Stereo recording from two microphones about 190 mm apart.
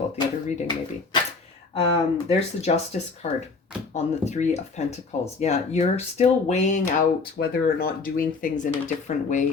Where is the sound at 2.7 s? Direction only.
40° left (ahead or behind).